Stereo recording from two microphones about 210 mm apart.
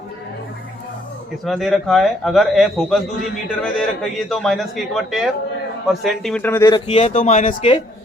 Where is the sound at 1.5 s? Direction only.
Centre (ahead or behind).